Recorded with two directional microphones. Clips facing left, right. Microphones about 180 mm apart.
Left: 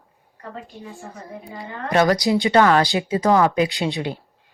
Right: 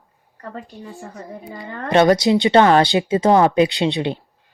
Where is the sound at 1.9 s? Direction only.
25° right (ahead or behind).